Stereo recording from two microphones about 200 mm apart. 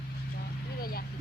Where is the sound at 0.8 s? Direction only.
50° left (ahead or behind).